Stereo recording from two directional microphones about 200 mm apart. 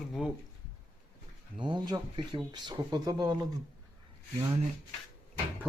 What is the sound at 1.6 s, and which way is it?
Speech, 25° right (ahead or behind).